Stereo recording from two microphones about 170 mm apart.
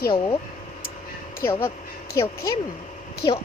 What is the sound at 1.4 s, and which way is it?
Speech, 15° left (ahead or behind).